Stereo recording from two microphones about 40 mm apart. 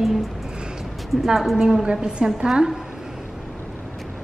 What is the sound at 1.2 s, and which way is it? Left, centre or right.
Speech, centre.